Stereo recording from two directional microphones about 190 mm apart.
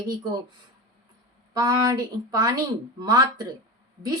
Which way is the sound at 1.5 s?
20° right (ahead or behind).